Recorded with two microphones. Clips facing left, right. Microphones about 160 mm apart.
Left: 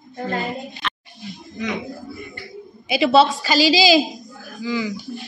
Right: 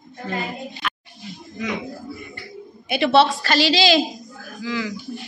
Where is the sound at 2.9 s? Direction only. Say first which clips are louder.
Left 1 dB; centre (ahead or behind).